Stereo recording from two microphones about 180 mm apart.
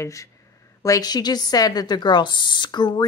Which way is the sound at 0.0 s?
15° left (ahead or behind).